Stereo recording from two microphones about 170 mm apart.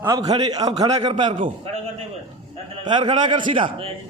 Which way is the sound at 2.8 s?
25° right (ahead or behind).